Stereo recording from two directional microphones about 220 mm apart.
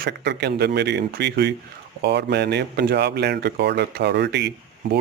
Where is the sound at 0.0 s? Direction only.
50° right (ahead or behind).